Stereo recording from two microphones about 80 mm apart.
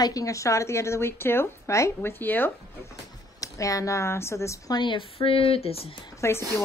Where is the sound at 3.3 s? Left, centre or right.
Left.